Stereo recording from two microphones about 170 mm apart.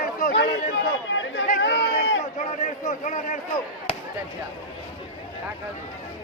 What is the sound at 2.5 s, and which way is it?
Speech, 45° left (ahead or behind).